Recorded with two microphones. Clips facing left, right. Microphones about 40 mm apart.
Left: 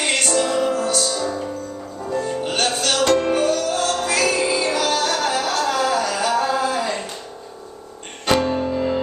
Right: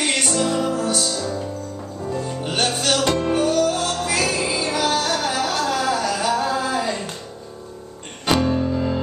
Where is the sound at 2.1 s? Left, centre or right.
Centre.